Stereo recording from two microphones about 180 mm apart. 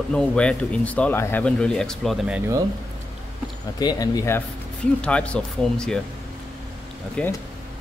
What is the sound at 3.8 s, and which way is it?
Speech, 20° left (ahead or behind).